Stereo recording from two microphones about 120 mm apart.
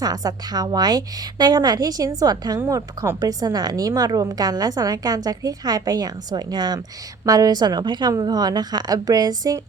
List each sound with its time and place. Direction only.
0.0 s speech: 30° right (ahead or behind)